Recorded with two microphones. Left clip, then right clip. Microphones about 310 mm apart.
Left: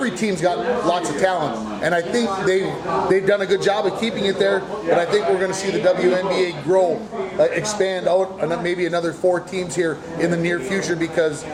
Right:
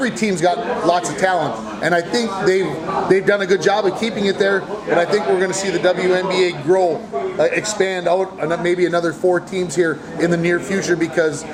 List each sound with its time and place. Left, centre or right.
0.0 s a man's voice: right